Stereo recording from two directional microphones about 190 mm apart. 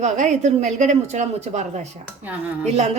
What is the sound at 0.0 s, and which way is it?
Speech, 40° right (ahead or behind).